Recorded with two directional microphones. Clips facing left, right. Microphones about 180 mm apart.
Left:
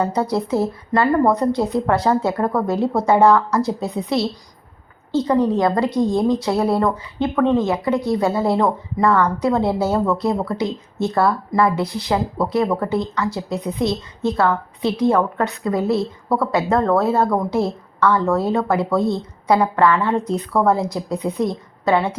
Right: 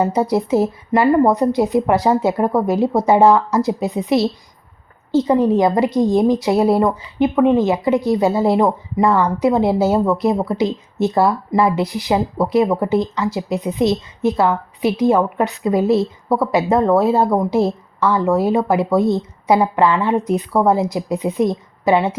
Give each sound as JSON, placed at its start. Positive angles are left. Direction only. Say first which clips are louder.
{"t": 0.0, "sound": "a woman's voice", "louder": "right 3 dB", "side_deg": -20}